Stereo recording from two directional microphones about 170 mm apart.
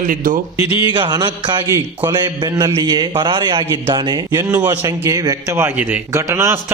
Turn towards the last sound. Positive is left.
turn(degrees=-15)  # may be behind; listen again after turning